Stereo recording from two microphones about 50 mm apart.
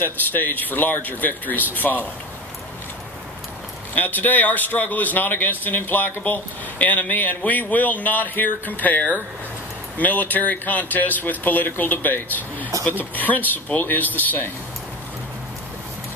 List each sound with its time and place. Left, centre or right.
0.0 s a man's voice: left
3.9 s a man's voice: left